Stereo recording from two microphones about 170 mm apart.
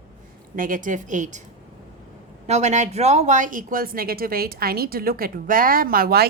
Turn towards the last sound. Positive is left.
turn(degrees=-65)  # may be behind; listen again after turning